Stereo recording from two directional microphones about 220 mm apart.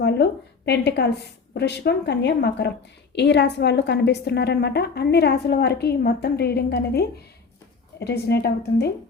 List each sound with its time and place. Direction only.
0.0 s a woman's voice: 50° left (ahead or behind)